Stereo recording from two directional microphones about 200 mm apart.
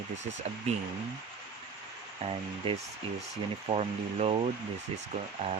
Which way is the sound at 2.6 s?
25° right (ahead or behind).